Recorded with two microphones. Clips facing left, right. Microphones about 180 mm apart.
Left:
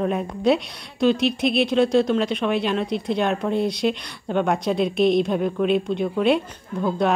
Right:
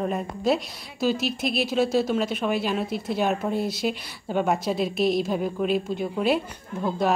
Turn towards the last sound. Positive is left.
turn(degrees=0)  # may be behind; listen again after turning